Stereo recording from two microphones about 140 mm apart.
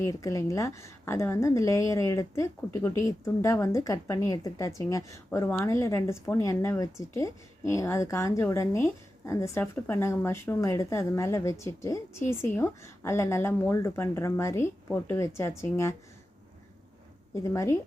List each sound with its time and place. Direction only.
0.0 s a woman's voice: 25° left (ahead or behind)
17.3 s a woman's voice: 20° left (ahead or behind)